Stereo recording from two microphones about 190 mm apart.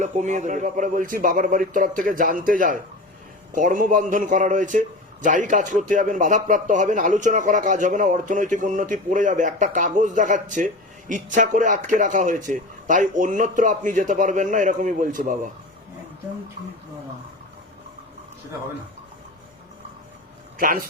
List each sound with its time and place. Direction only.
0.0 s a man's voice: 40° right (ahead or behind)
20.6 s speech: 45° right (ahead or behind)